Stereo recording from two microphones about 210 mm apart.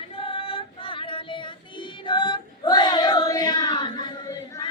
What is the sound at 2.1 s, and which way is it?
Child singing, 20° left (ahead or behind).